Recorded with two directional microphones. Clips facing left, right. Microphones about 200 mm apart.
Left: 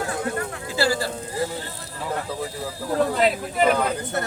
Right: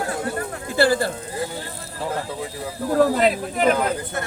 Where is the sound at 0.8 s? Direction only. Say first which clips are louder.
Right 5 dB; 55° right (ahead or behind).